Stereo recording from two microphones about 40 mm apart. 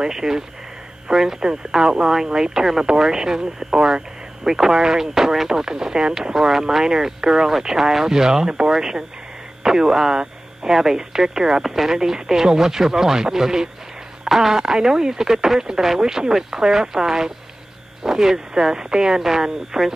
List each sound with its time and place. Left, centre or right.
0.0 s speech: centre
11.6 s speech: centre